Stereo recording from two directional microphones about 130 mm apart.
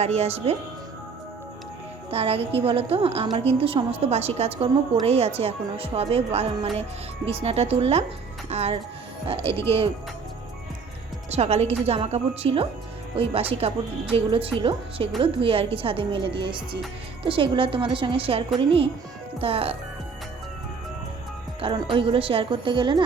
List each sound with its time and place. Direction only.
0.0 s speech: 55° right (ahead or behind)
2.0 s speech: 50° right (ahead or behind)
11.3 s a woman's voice: 55° right (ahead or behind)
21.9 s a woman's voice: 45° right (ahead or behind)